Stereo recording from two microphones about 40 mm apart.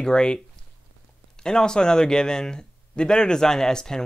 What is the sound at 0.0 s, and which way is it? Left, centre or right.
Speech, left.